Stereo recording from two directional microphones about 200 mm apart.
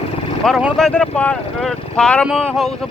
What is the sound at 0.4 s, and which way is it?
Speech, centre (ahead or behind).